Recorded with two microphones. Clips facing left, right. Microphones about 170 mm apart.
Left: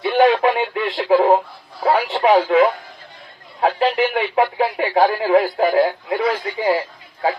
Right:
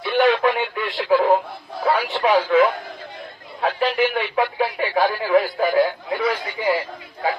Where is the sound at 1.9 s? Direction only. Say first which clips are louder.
Left 4 dB; 25° left (ahead or behind).